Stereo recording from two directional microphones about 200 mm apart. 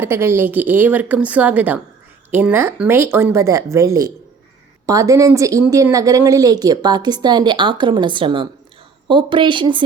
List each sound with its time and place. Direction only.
0.0 s speech: 10° right (ahead or behind)